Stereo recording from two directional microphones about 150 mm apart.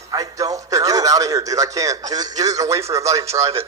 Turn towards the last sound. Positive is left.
turn(degrees=-20)  # may be behind; listen again after turning